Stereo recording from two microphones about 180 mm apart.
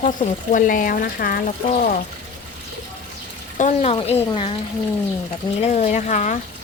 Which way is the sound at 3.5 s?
40° left (ahead or behind).